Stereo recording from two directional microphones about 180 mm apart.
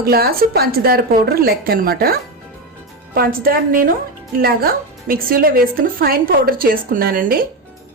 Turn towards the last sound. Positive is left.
turn(degrees=-55)  # may be behind; listen again after turning